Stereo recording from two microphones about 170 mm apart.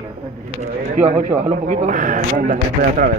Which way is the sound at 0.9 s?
50° right (ahead or behind).